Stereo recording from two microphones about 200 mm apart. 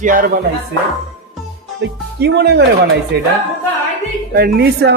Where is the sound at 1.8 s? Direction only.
55° right (ahead or behind).